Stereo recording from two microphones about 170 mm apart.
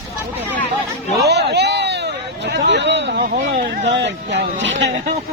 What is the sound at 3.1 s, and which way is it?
Speech, 50° right (ahead or behind).